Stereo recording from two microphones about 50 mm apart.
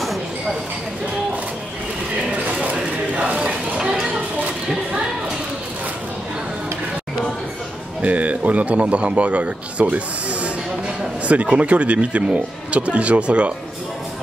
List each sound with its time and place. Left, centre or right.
2.7 s a sound: right
8.0 s a man's voice: right
11.5 s a man's voice: right